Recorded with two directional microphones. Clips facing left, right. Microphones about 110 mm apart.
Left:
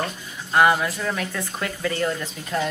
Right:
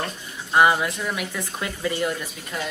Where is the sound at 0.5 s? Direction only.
15° right (ahead or behind).